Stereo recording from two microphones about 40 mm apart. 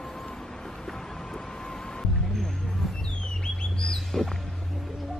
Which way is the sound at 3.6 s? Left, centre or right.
Centre.